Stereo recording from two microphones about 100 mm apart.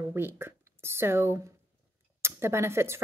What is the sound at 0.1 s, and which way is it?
Speech, 25° right (ahead or behind).